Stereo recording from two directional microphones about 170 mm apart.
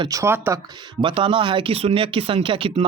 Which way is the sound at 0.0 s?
20° right (ahead or behind).